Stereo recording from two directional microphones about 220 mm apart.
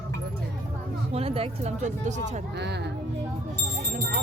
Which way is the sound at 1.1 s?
25° right (ahead or behind).